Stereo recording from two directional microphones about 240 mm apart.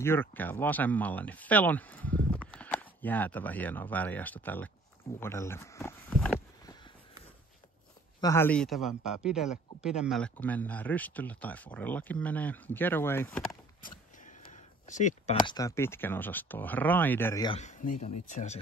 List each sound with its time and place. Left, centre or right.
0.0 s a man's voice: centre
8.2 s a man's voice: centre
14.4 s a sound: left
15.4 s a man's voice: centre
17.6 s speech: left